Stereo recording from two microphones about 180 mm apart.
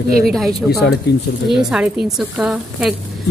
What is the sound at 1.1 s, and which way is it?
Speech, 70° left (ahead or behind).